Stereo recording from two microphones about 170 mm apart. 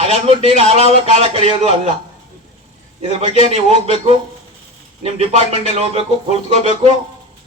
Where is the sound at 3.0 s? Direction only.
35° right (ahead or behind).